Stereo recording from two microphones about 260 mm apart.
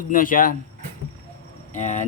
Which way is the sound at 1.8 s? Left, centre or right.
Left.